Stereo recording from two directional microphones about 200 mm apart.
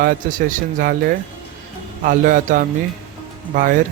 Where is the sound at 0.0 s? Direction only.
40° right (ahead or behind).